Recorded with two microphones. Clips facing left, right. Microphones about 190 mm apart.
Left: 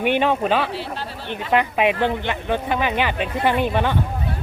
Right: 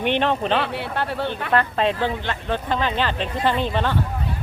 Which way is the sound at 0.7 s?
60° right (ahead or behind).